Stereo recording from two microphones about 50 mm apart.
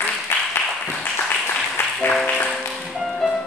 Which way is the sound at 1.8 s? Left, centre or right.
Left.